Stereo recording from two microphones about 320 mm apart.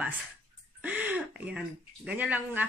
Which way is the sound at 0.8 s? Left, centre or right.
Centre.